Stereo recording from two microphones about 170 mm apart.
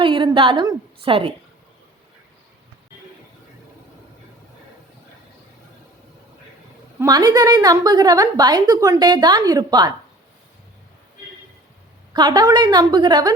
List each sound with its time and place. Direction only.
0.0 s a woman's voice: 30° right (ahead or behind)
7.0 s a woman's voice: 20° right (ahead or behind)
12.1 s a woman's voice: 25° right (ahead or behind)